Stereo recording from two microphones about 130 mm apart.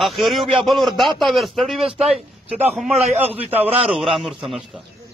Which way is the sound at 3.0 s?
55° right (ahead or behind).